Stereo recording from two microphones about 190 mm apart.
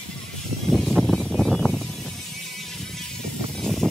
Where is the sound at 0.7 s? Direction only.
Centre (ahead or behind).